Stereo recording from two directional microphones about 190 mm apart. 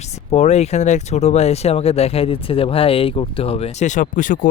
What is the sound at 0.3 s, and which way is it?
Speech, 35° left (ahead or behind).